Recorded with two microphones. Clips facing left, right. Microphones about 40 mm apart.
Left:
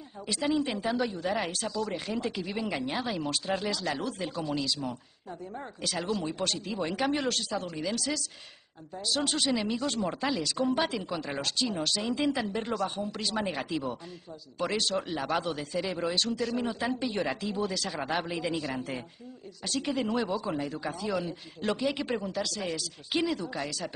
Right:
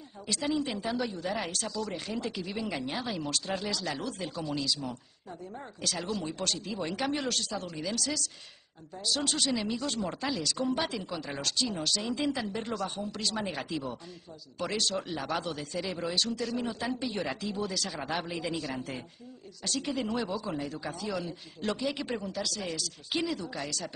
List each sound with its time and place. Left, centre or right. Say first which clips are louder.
0.3 s speech: left 2 dB; centre
18.3 s speech: left 2 dB; left
18.6 s speech: left 2 dB; centre
21.8 s speech: left 3 dB; left
22.1 s speech: left 2 dB; centre